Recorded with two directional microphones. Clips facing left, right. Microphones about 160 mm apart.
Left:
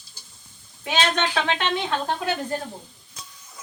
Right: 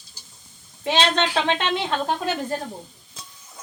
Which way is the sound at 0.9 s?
25° right (ahead or behind).